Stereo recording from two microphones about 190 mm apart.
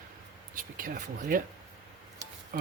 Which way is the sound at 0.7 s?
45° right (ahead or behind).